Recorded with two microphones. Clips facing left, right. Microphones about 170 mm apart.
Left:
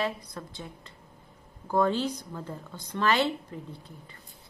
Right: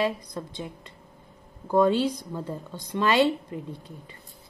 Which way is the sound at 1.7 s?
15° right (ahead or behind).